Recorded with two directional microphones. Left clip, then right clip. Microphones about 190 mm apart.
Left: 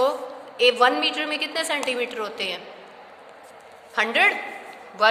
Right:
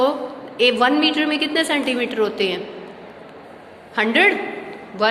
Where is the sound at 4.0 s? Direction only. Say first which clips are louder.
Right 4 dB; 25° left (ahead or behind).